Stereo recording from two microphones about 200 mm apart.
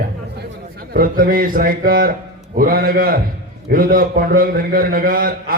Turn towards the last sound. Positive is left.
turn(degrees=-45)  # may be behind; listen again after turning